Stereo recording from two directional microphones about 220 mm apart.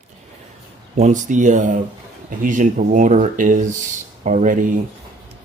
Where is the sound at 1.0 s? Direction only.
35° right (ahead or behind).